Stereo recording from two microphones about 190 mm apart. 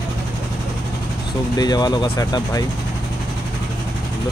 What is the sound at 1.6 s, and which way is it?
Speech, 20° left (ahead or behind).